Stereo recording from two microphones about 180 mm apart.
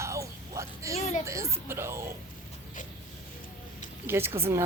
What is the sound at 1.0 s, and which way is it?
Speech, 40° left (ahead or behind).